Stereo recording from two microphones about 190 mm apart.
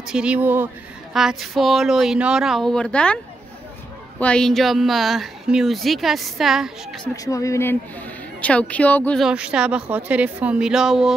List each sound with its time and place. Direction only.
0.1 s speech: 5° right (ahead or behind)
4.2 s speech: 5° left (ahead or behind)
7.2 s speech: 15° left (ahead or behind)
9.2 s speech: 5° right (ahead or behind)